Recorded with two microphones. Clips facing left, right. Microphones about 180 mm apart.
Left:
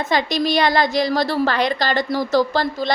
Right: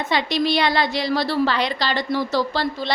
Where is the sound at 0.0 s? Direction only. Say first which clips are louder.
Left 1 dB; 45° left (ahead or behind).